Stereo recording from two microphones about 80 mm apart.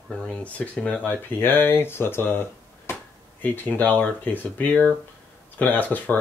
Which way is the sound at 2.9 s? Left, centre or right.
Left.